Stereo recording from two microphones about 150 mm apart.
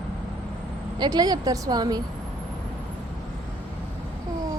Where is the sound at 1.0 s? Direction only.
25° right (ahead or behind).